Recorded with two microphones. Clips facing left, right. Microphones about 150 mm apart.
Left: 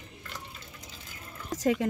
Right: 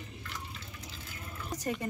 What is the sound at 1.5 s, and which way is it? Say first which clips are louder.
Speech: left 8 dB; 90° left.